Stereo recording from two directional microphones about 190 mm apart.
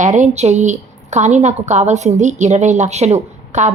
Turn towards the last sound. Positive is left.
turn(degrees=-35)  # may be behind; listen again after turning